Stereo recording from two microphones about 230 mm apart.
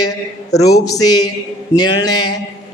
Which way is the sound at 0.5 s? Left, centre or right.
Centre.